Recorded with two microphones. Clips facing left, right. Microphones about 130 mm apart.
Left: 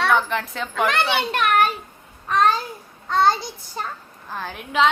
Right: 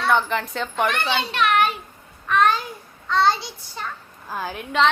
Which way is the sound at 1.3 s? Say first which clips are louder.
Right 1 dB; 45° left (ahead or behind).